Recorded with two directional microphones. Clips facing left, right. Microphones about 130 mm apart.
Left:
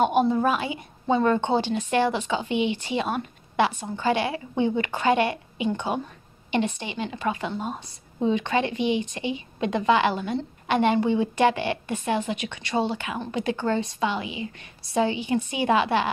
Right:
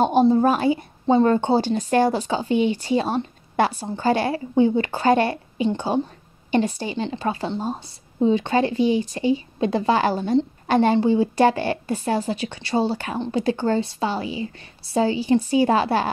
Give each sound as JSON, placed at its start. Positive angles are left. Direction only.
{"t": 0.0, "sound": "a woman's voice", "side_deg": -35}